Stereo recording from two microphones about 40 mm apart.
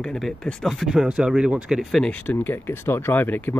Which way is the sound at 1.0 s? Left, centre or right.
Right.